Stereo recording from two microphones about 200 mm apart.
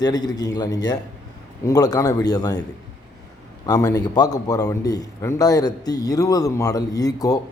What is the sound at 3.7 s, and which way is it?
A man's voice, 20° left (ahead or behind).